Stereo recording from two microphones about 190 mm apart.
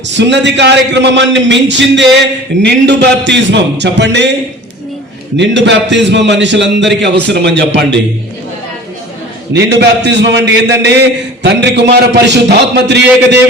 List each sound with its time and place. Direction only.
0.1 s a man's voice: 70° right (ahead or behind)
5.4 s a man's voice: 65° right (ahead or behind)
9.5 s a man's voice: 65° right (ahead or behind)